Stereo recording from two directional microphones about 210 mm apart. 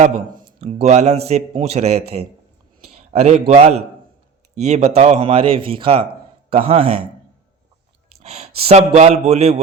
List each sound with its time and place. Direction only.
0.0 s a man's voice: 35° right (ahead or behind)
8.2 s a man's voice: 30° right (ahead or behind)